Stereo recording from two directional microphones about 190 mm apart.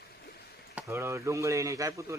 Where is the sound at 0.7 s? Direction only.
15° right (ahead or behind).